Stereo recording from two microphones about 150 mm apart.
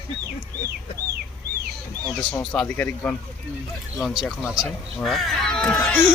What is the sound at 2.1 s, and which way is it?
Speech, 5° left (ahead or behind).